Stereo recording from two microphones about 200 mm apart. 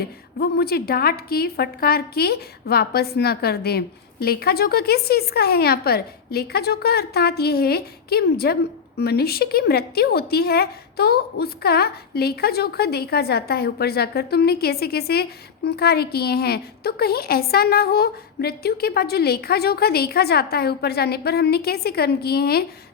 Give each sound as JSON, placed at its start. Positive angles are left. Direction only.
{"t": 0.0, "sound": "a woman's voice", "side_deg": 50}